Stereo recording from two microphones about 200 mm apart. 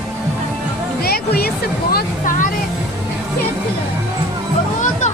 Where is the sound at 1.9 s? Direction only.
40° left (ahead or behind).